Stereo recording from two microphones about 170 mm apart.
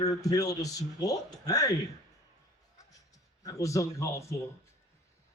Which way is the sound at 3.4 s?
20° left (ahead or behind).